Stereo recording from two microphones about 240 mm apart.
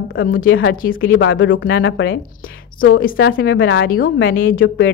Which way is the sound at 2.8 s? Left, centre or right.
Left.